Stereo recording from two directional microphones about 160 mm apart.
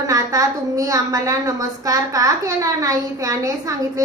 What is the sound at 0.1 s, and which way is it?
A woman's voice, 20° right (ahead or behind).